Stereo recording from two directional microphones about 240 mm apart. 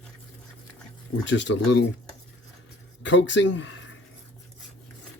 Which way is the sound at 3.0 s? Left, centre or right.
Left.